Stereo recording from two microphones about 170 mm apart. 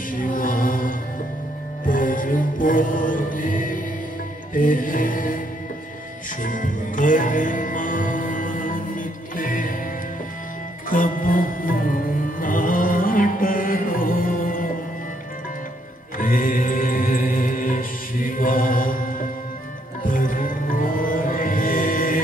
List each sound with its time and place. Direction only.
0.1 s choir: 55° left (ahead or behind)
1.9 s music: 55° left (ahead or behind)
4.6 s mantra: 55° left (ahead or behind)
6.4 s music: 50° left (ahead or behind)
10.9 s a sound: 55° left (ahead or behind)
12.4 s music: 55° left (ahead or behind)
16.2 s music: 55° left (ahead or behind)